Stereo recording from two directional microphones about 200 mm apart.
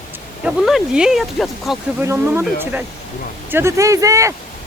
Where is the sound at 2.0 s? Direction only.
10° right (ahead or behind).